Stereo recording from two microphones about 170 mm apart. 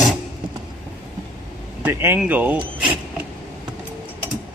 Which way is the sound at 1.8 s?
10° right (ahead or behind).